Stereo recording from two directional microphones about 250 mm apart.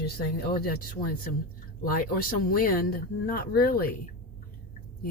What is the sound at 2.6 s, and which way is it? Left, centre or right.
Speech, left.